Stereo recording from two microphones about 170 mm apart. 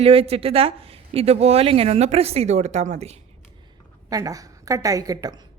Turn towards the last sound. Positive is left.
turn(degrees=-20)  # may be behind; listen again after turning